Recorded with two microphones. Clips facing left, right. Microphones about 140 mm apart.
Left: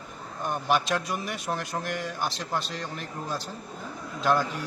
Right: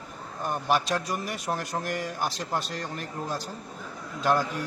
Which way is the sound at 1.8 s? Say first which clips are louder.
Right 1 dB; 45° right (ahead or behind).